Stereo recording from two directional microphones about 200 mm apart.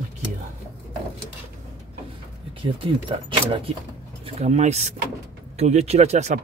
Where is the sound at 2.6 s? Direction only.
25° right (ahead or behind).